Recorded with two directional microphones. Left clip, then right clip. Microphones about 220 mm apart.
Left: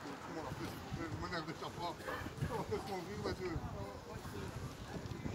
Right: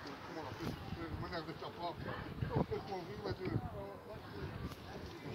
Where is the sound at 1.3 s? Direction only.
55° left (ahead or behind).